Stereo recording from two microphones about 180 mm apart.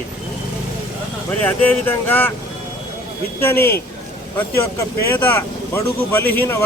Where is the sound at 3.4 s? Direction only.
15° left (ahead or behind).